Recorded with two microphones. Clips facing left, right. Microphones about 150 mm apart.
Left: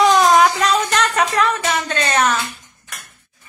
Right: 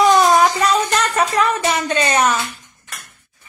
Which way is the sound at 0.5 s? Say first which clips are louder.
Right 1 dB; 10° right (ahead or behind).